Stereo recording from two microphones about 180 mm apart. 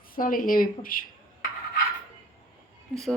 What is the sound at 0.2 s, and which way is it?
Speech, 50° left (ahead or behind).